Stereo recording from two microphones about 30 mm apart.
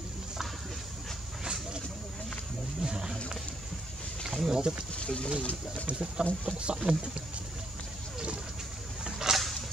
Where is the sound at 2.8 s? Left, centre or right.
Right.